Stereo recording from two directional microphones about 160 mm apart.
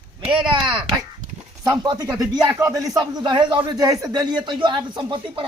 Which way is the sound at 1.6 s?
25° right (ahead or behind).